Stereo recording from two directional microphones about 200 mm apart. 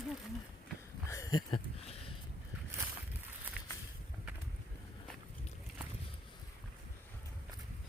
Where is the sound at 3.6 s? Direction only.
5° right (ahead or behind).